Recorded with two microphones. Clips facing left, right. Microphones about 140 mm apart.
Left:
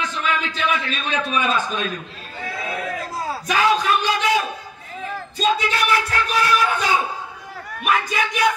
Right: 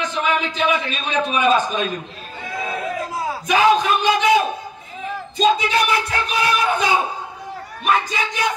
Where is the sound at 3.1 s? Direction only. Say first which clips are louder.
Right 4 dB; 15° right (ahead or behind).